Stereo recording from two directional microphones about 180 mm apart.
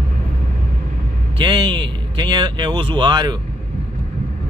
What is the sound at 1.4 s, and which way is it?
Speech, 30° right (ahead or behind).